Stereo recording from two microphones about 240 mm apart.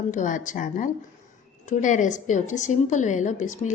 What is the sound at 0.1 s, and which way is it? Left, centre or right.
A woman's voice, left.